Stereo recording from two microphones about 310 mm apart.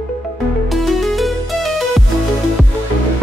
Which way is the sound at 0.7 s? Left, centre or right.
Centre.